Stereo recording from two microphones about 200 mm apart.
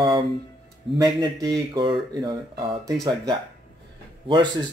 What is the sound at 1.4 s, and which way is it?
Speech, 20° right (ahead or behind).